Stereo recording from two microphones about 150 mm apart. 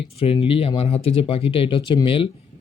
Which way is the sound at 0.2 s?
40° left (ahead or behind).